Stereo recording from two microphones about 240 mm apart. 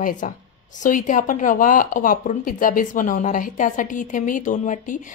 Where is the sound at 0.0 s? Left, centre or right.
Left.